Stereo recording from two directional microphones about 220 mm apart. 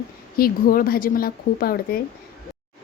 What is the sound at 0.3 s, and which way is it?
Speech, 40° left (ahead or behind).